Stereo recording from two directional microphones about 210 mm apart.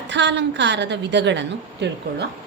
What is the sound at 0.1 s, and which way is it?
A woman's voice, 55° right (ahead or behind).